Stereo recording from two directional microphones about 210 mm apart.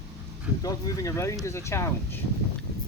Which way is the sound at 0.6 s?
15° left (ahead or behind).